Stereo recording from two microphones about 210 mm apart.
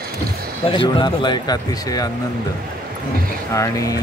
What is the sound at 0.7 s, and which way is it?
Speech, 20° left (ahead or behind).